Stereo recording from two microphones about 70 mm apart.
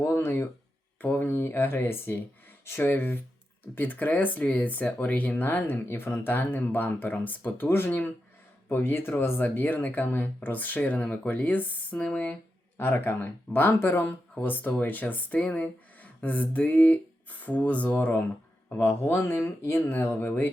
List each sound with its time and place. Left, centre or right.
0.0 s speech: left